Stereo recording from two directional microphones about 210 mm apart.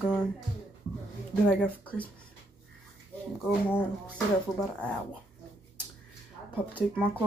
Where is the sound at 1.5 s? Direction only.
5° left (ahead or behind).